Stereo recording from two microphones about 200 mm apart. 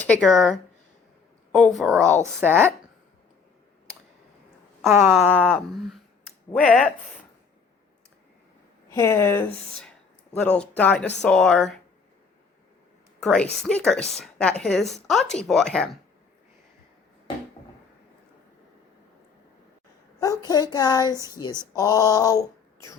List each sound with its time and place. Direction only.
0.2 s speech: centre (ahead or behind)
1.5 s speech: centre (ahead or behind)
2.2 s speech: 10° right (ahead or behind)
4.9 s speech: 10° right (ahead or behind)
6.6 s speech: centre (ahead or behind)
8.9 s a woman's voice: 15° left (ahead or behind)
13.2 s speech: 5° left (ahead or behind)
20.1 s speech: 15° left (ahead or behind)
21.8 s a sound: 15° left (ahead or behind)